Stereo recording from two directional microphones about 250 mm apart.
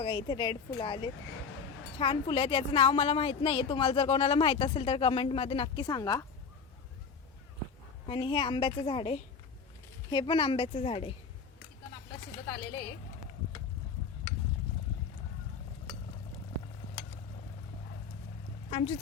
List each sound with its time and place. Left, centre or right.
0.0 s a woman's voice: centre
8.0 s a woman's voice: left
18.7 s speech: left